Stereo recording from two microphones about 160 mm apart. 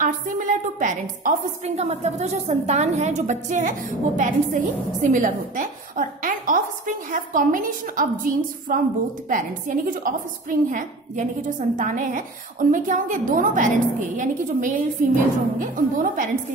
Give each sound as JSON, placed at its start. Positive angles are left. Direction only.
{"t": 0.0, "sound": "a woman's voice", "side_deg": -55}
{"t": 1.8, "sound": "a woman's voice", "side_deg": -45}